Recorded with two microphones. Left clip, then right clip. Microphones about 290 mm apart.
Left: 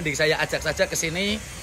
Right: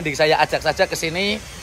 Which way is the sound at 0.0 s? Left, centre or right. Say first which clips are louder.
Right 6 dB; centre.